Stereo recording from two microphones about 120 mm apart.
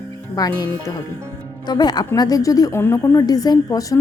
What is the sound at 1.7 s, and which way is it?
A woman's voice, 35° left (ahead or behind).